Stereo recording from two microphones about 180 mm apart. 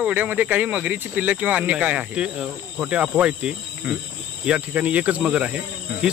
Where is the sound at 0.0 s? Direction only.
10° right (ahead or behind).